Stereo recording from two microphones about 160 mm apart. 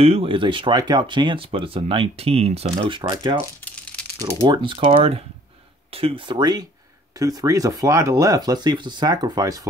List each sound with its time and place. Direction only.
0.0 s speech: 35° right (ahead or behind)
3.6 s a sound: 10° left (ahead or behind)
4.2 s speech: 25° right (ahead or behind)